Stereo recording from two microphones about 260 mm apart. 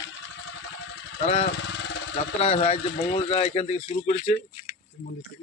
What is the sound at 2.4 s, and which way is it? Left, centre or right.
Speech, left.